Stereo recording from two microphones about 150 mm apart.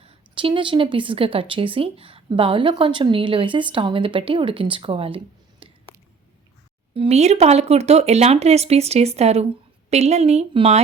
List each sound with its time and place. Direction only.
0.0 s speech: 40° right (ahead or behind)
6.9 s speech: 40° right (ahead or behind)